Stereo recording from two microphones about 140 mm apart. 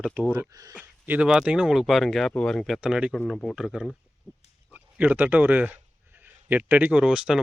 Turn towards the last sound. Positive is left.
turn(degrees=-5)  # may be behind; listen again after turning